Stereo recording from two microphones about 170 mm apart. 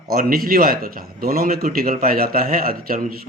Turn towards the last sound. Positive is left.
turn(degrees=-60)  # may be behind; listen again after turning